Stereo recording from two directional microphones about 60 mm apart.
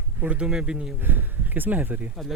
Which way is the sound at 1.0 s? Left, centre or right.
Right.